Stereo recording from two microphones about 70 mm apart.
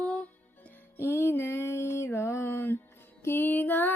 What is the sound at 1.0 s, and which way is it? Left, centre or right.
Music, left.